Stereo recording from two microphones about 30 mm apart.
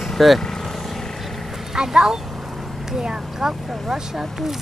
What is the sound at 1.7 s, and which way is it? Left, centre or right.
Speech, right.